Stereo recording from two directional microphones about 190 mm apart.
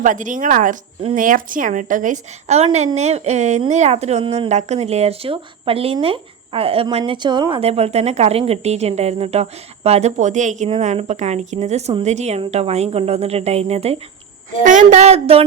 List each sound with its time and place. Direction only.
0.0 s speech: 45° right (ahead or behind)